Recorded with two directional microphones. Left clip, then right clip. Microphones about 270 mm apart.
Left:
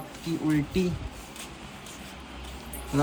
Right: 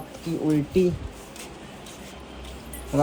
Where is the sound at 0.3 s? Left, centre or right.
Centre.